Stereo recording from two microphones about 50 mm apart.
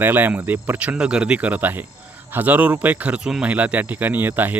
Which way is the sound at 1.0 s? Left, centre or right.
Centre.